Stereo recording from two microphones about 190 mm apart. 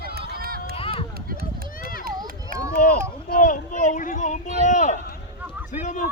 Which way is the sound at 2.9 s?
45° left (ahead or behind).